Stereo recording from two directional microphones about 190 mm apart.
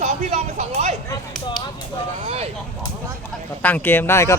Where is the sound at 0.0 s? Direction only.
35° right (ahead or behind).